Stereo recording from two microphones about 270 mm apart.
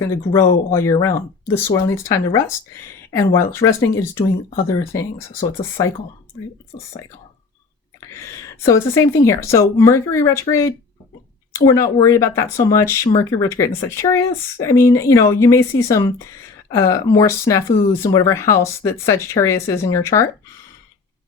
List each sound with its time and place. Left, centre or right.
0.0 s speech: centre
6.7 s speech: left
8.6 s speech: centre